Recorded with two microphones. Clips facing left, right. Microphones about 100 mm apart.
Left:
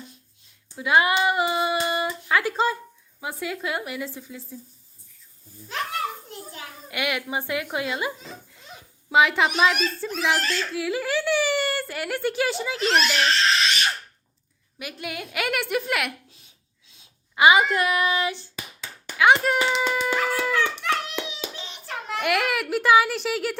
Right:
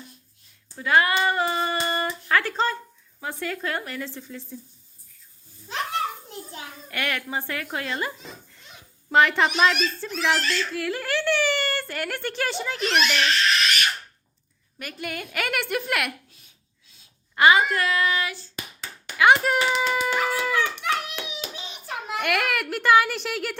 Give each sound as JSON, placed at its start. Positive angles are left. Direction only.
{"t": 0.8, "sound": "speech", "side_deg": 15}
{"t": 6.8, "sound": "a woman's voice", "side_deg": 10}
{"t": 13.1, "sound": "giggle", "side_deg": 30}
{"t": 14.8, "sound": "a woman's voice", "side_deg": 5}
{"t": 17.3, "sound": "speech", "side_deg": 10}
{"t": 19.1, "sound": "speech", "side_deg": 0}
{"t": 19.9, "sound": "hands", "side_deg": -5}
{"t": 22.2, "sound": "a woman's voice", "side_deg": 0}